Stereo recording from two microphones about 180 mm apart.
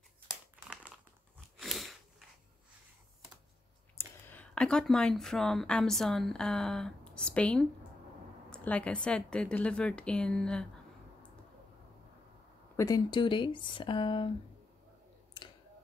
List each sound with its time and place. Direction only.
1.6 s a sound: centre (ahead or behind)
4.3 s a woman's voice: 5° left (ahead or behind)
12.7 s speech: 20° left (ahead or behind)